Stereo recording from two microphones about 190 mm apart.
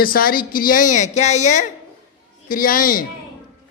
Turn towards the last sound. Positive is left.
turn(degrees=45)  # may be behind; listen again after turning